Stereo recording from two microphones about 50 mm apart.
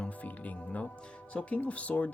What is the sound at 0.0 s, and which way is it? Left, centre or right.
Music, left.